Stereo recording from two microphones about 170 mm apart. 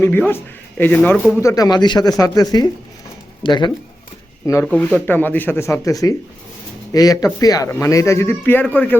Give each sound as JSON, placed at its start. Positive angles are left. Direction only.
{"t": 0.0, "sound": "speech", "side_deg": 10}
{"t": 1.4, "sound": "speech", "side_deg": 20}
{"t": 4.6, "sound": "speech", "side_deg": 5}